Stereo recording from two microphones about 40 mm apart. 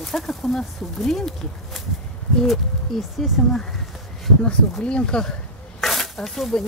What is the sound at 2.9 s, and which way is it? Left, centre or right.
Speech, centre.